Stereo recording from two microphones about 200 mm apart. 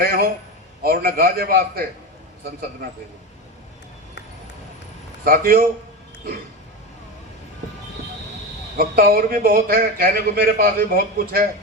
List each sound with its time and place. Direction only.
0.0 s a man's voice: 50° right (ahead or behind)
5.2 s a man's voice: 45° right (ahead or behind)
8.8 s a man's voice: 50° right (ahead or behind)